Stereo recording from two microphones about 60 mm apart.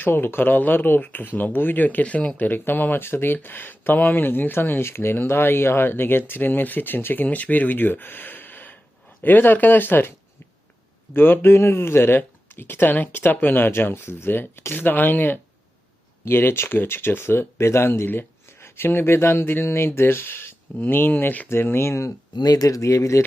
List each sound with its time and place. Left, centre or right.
0.0 s speech: left
11.1 s speech: left